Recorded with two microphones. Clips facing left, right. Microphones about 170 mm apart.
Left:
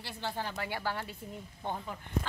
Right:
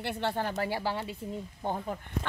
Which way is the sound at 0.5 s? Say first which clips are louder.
Right 5 dB; 35° right (ahead or behind).